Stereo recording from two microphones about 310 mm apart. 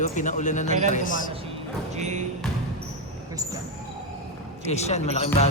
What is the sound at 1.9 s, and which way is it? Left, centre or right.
Speech, right.